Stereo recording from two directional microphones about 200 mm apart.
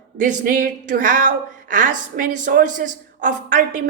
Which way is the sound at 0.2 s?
40° right (ahead or behind).